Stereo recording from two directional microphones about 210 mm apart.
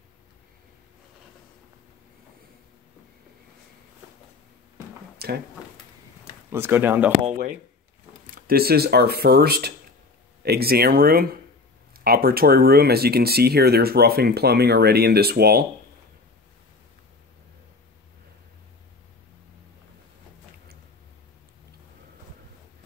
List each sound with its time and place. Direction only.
5.2 s a sound: 50° right (ahead or behind)
6.5 s speech: 10° right (ahead or behind)
8.4 s speech: 45° right (ahead or behind)